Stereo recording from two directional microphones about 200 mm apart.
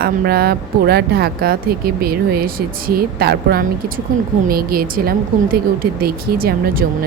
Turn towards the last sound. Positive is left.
turn(degrees=-50)  # may be behind; listen again after turning